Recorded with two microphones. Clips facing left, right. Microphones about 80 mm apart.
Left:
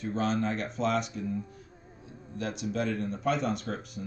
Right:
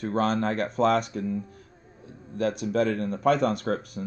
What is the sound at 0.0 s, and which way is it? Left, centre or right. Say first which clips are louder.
Speech: right 4 dB; right.